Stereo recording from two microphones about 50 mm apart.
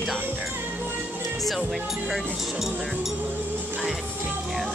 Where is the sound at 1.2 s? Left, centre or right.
Centre.